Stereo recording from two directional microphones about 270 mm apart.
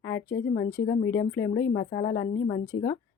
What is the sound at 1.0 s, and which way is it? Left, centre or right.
Speech, left.